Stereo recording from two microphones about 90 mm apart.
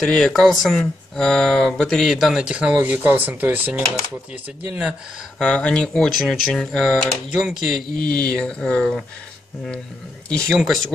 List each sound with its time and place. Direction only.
0.0 s speech: 5° left (ahead or behind); by 4.9 s 20° right (ahead or behind)
5.4 s speech: 10° left (ahead or behind)
8.1 s speech: 15° left (ahead or behind)
10.5 s speech: centre (ahead or behind)